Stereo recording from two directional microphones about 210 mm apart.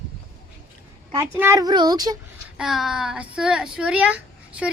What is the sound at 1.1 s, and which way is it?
A child's voice, 15° right (ahead or behind).